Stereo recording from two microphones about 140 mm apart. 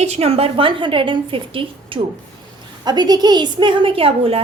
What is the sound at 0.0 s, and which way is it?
A woman's voice, 50° right (ahead or behind).